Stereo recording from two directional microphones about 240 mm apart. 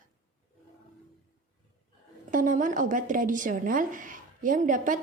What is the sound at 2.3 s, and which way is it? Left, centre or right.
Speech, right.